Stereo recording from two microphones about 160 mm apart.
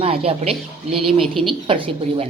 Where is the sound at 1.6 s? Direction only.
35° right (ahead or behind).